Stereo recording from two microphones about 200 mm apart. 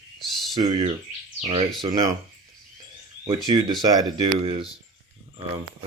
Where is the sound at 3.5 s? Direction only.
25° right (ahead or behind).